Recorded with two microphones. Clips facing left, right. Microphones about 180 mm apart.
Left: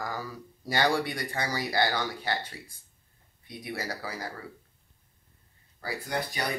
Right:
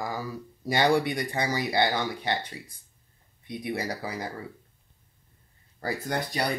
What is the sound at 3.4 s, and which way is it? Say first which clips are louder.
Speech: right 5 dB; 20° right (ahead or behind).